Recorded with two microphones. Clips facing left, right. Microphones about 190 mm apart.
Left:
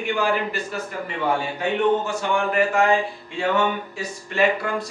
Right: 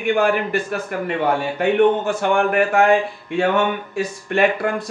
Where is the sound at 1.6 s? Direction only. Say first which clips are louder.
Right 6 dB; 60° right (ahead or behind).